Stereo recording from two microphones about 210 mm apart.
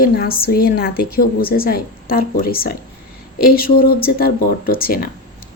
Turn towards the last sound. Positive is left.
turn(degrees=45)  # may be behind; listen again after turning